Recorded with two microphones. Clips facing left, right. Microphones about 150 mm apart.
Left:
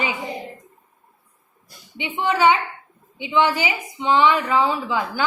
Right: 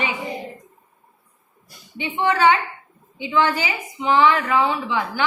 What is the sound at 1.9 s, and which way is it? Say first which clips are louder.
A woman's voice: right 1 dB; 15° left (ahead or behind).